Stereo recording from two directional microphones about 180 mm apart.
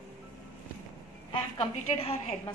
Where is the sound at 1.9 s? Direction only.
35° left (ahead or behind).